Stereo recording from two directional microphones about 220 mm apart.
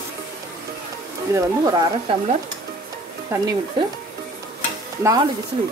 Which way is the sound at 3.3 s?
15° right (ahead or behind).